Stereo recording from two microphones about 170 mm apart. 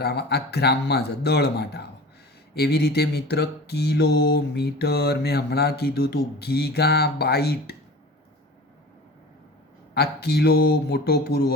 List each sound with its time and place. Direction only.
0.0 s mantra: 75° left (ahead or behind)
9.9 s mantra: 70° left (ahead or behind)